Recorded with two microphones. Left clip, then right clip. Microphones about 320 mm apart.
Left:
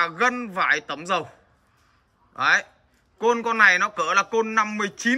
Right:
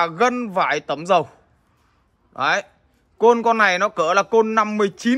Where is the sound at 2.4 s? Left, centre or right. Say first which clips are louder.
Even; centre.